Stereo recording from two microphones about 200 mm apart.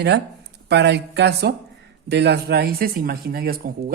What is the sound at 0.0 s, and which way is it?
Speech, 60° right (ahead or behind).